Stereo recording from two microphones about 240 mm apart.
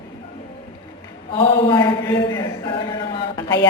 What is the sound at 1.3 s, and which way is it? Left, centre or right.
A man's voice, left.